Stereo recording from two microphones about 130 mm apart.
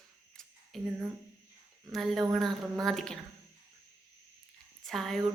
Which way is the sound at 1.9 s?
Centre (ahead or behind).